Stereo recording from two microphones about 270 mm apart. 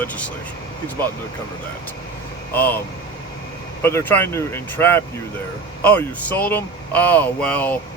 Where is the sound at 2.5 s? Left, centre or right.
Centre.